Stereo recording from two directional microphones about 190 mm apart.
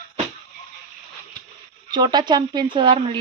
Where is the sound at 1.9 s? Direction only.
20° right (ahead or behind).